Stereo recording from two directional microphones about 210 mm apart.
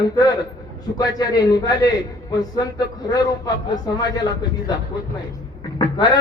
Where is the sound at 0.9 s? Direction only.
20° left (ahead or behind).